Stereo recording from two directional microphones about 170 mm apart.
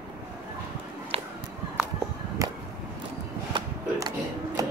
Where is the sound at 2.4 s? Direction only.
20° right (ahead or behind).